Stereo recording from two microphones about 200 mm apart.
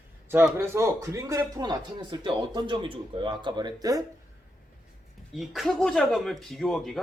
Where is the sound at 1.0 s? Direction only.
15° right (ahead or behind).